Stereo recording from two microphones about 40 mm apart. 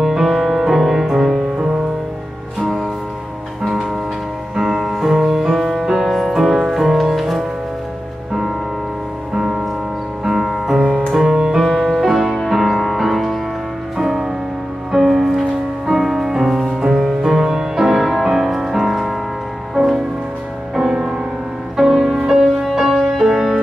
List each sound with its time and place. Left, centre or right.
0.0 s music: centre
2.6 s music: centre
5.0 s music: centre
9.3 s music: centre
10.8 s music: centre
11.5 s music: centre
20.7 s music: centre